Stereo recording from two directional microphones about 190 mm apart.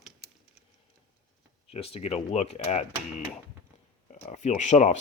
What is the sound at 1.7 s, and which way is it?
Speech, 30° left (ahead or behind).